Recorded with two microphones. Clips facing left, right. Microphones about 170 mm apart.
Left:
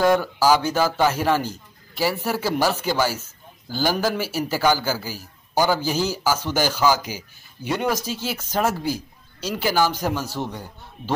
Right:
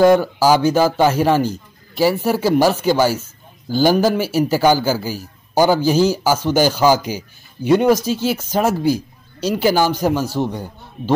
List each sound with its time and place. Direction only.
0.0 s a man's voice: 20° right (ahead or behind)